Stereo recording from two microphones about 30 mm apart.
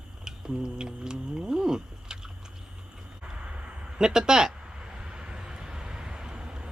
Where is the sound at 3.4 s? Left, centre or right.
Right.